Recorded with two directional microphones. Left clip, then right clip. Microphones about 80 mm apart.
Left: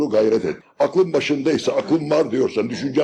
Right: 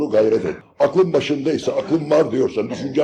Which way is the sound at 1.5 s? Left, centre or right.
Right.